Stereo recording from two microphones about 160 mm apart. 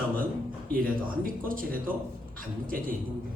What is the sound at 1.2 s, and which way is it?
A man's voice, 60° right (ahead or behind).